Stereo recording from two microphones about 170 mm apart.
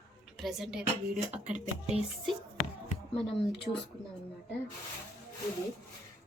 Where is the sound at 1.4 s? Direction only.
45° right (ahead or behind).